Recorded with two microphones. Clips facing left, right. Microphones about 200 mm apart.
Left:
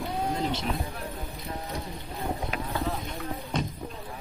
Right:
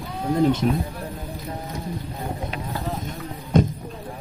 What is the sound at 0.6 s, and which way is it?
Speech, 40° right (ahead or behind).